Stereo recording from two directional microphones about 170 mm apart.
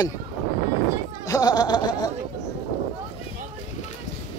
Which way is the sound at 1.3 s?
20° left (ahead or behind).